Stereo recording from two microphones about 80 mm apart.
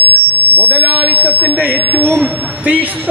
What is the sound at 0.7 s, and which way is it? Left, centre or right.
A man's voice, right.